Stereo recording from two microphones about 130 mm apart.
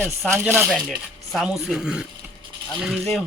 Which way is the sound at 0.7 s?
Centre (ahead or behind).